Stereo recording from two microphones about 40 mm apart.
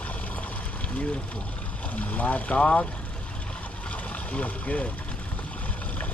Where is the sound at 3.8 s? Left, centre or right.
Left.